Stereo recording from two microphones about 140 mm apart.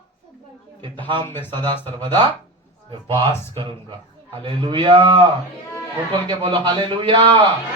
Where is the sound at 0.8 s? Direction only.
35° right (ahead or behind).